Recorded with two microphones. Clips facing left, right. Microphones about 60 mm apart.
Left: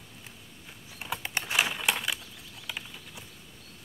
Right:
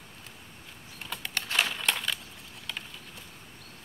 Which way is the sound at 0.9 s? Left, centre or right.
Centre.